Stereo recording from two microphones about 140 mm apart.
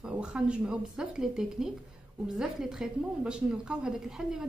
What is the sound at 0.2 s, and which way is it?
A woman's voice, 5° right (ahead or behind).